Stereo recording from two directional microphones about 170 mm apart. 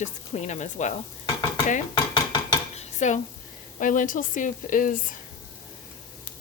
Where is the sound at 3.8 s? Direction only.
50° left (ahead or behind).